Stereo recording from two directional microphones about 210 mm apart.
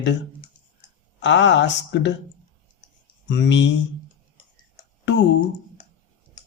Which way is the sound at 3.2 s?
55° left (ahead or behind).